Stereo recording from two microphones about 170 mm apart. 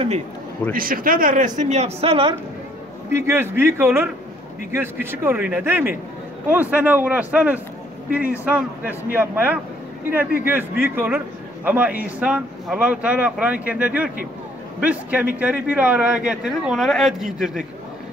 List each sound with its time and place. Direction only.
0.7 s speech: 55° right (ahead or behind)
1.6 s a man's voice: 40° right (ahead or behind)
3.1 s speech: 15° right (ahead or behind)
5.1 s speech: 10° right (ahead or behind)